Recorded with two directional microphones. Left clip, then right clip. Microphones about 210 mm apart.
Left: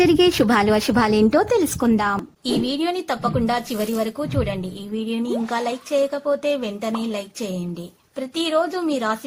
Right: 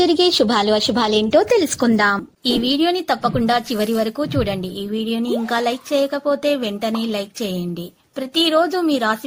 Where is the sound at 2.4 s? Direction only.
20° right (ahead or behind).